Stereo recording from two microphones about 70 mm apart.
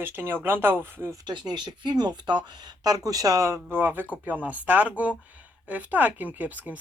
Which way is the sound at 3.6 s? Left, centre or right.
Right.